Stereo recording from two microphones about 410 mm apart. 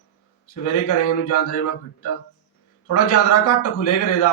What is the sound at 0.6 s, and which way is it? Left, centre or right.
Speech, left.